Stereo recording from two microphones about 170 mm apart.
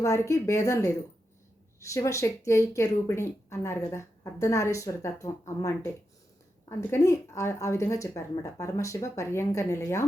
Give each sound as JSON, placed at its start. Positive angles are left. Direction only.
{"t": 0.0, "sound": "speech", "side_deg": 15}